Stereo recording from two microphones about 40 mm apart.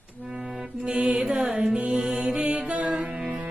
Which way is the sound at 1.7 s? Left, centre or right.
Right.